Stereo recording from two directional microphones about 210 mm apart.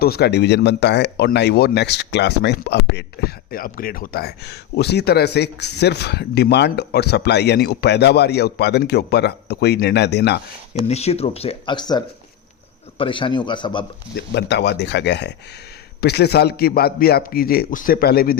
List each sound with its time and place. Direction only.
0.0 s speech: 50° left (ahead or behind)
10.8 s speech: 30° left (ahead or behind)
14.2 s speech: 55° left (ahead or behind)